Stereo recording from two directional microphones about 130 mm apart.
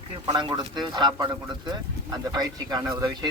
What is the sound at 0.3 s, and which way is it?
Speech, 35° right (ahead or behind).